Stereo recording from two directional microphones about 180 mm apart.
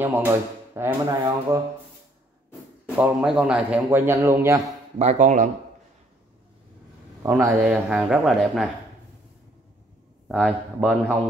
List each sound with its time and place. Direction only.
0.0 s speech: 10° right (ahead or behind)
3.0 s speech: 5° right (ahead or behind)
4.9 s speech: 40° right (ahead or behind)
7.2 s speech: 15° right (ahead or behind)
7.6 s speech: 5° right (ahead or behind)
10.2 s speech: 5° right (ahead or behind)